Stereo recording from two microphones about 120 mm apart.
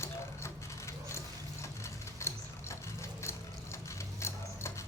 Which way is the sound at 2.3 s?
20° left (ahead or behind).